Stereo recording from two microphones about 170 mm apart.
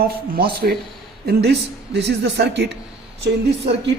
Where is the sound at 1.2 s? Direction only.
80° right.